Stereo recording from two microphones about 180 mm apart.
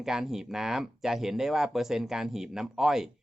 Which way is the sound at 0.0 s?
Centre (ahead or behind).